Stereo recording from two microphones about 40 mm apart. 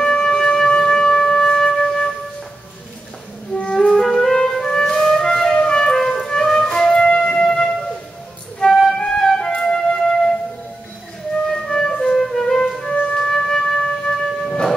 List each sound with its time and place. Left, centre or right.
0.0 s wind instrument: centre
3.5 s music: left
3.9 s music: centre
7.0 s wind instrument: left
8.7 s flute: centre
9.6 s music: centre
11.4 s music: centre
13.1 s wind instrument: centre